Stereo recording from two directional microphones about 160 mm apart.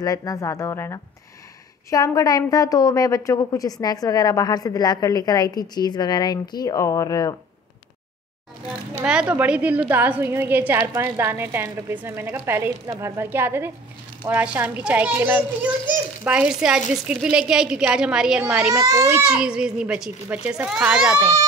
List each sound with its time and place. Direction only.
0.0 s a woman's voice: 20° left (ahead or behind)
9.0 s a child's voice: 5° right (ahead or behind)